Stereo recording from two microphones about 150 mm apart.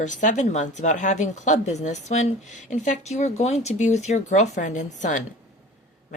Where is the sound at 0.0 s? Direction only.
55° left (ahead or behind).